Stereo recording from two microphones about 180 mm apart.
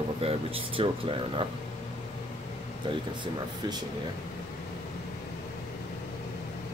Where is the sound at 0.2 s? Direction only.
30° right (ahead or behind).